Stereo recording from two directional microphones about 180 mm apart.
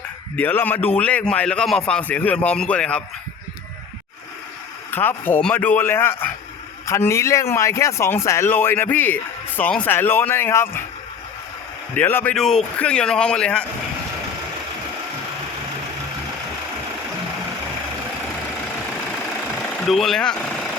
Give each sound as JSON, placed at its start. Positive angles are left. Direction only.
{"t": 0.3, "sound": "speech", "side_deg": 10}
{"t": 4.9, "sound": "speech", "side_deg": 10}
{"t": 11.9, "sound": "speech", "side_deg": 10}
{"t": 19.8, "sound": "speech", "side_deg": 0}